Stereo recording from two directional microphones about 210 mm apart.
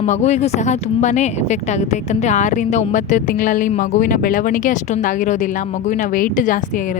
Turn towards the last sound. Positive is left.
turn(degrees=40)  # may be behind; listen again after turning